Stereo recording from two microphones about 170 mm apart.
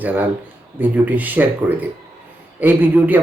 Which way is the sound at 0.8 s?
10° right (ahead or behind).